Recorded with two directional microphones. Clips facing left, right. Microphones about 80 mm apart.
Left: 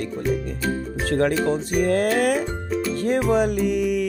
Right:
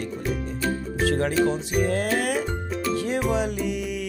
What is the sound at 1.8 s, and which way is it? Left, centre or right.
Speech, left.